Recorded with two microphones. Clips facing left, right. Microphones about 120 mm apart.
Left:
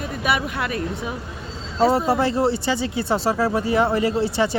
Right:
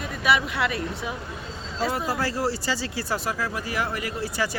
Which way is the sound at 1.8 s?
30° left (ahead or behind).